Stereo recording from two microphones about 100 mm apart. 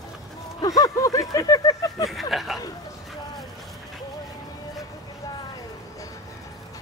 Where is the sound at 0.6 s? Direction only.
35° left (ahead or behind).